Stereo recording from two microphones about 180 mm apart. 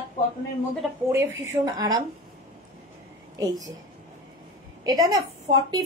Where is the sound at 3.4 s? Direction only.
20° right (ahead or behind).